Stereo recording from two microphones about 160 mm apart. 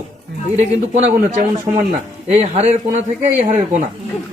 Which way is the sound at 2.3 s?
40° right (ahead or behind).